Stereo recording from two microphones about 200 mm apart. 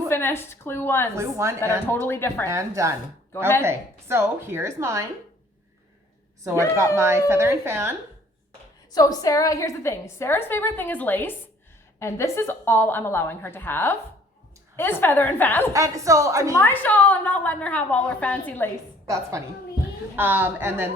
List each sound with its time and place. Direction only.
0.1 s a woman's voice: 10° left (ahead or behind)
1.1 s a woman's voice: 15° right (ahead or behind)
1.9 s a woman's voice: 10° left (ahead or behind)
2.5 s a woman's voice: 15° right (ahead or behind)
6.4 s a woman's voice: 15° right (ahead or behind)
8.9 s a woman's voice: 20° left (ahead or behind)
15.7 s a woman's voice: 15° right (ahead or behind)
16.6 s a woman's voice: 10° left (ahead or behind)
19.0 s a woman's voice: 15° right (ahead or behind)